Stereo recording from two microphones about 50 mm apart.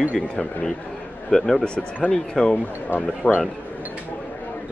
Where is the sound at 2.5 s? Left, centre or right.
Left.